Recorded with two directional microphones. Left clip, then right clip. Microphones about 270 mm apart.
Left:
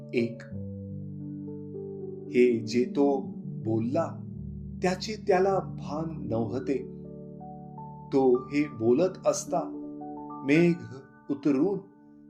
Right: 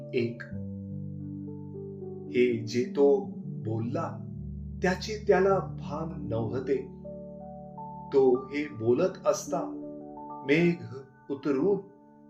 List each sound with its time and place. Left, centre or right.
0.1 s speech: left
2.3 s speech: left
8.1 s speech: left
11.3 s speech: left